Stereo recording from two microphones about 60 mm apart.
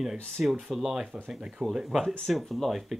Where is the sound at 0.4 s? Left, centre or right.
Centre.